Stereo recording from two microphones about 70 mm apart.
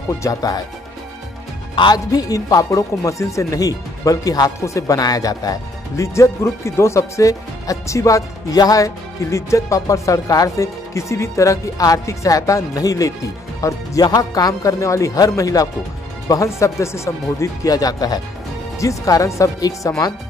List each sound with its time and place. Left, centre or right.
0.2 s speech: left
1.9 s speech: left
6.1 s speech: left
14.0 s speech: left
17.6 s speech: left
18.8 s speech: left